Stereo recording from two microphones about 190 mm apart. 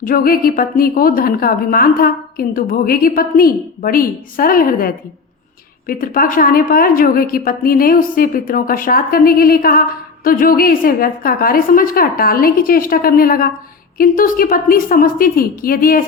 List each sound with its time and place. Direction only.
0.0 s a woman's voice: 50° left (ahead or behind)